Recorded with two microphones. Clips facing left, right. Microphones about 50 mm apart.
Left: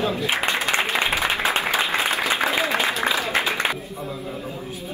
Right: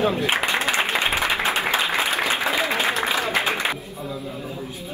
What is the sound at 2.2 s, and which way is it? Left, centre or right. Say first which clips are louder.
Applause: left 1 dB; left.